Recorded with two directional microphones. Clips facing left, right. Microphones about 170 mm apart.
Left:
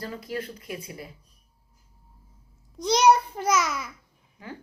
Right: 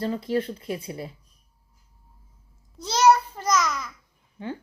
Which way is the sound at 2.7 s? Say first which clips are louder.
Even; 15° left (ahead or behind).